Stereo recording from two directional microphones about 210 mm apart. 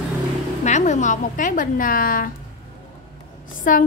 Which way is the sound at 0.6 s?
35° left (ahead or behind).